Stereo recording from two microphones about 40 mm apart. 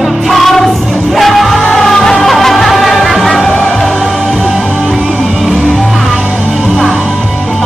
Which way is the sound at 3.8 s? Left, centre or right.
Centre.